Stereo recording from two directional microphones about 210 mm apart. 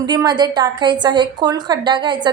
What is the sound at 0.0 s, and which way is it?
A woman's voice, 20° right (ahead or behind).